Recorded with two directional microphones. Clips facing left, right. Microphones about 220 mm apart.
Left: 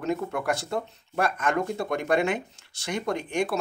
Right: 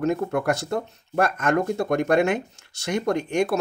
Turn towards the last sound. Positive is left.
turn(degrees=-45)  # may be behind; listen again after turning